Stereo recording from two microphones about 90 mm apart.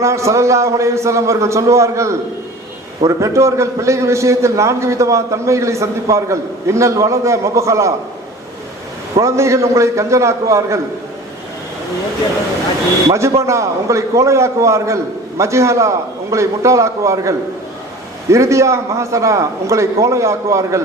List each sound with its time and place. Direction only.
0.0 s a man's voice: 35° right (ahead or behind)
9.1 s a man's voice: 35° right (ahead or behind)
13.1 s a man's voice: 35° right (ahead or behind)